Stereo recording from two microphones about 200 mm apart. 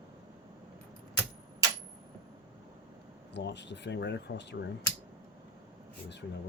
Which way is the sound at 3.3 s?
60° left (ahead or behind).